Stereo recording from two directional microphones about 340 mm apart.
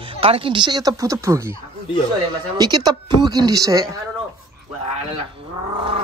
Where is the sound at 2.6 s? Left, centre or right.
Centre.